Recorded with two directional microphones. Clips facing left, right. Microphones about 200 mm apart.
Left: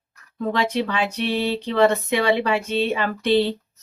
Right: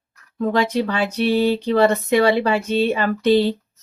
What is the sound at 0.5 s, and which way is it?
Speech, 40° right (ahead or behind).